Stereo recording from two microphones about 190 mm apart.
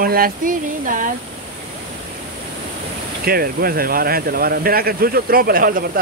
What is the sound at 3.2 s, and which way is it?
Speech, 50° right (ahead or behind).